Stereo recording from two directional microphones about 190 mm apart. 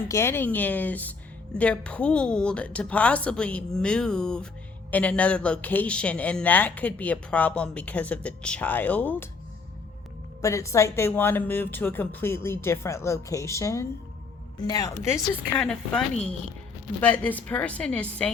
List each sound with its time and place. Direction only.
0.1 s a woman's voice: 15° left (ahead or behind)
10.4 s speech: 15° left (ahead or behind)
15.1 s a woman's voice: 5° left (ahead or behind)